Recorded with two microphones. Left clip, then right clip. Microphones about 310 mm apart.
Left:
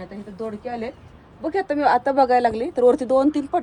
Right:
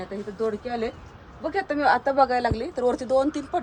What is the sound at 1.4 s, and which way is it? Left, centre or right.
Speech, left.